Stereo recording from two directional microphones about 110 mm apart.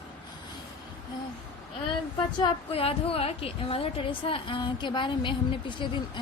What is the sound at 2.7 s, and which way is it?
A woman's voice, 60° left (ahead or behind).